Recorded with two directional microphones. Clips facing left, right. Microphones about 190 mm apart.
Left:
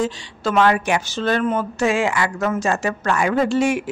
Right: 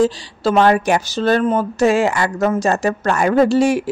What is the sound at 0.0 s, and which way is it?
A woman's voice, 35° right (ahead or behind).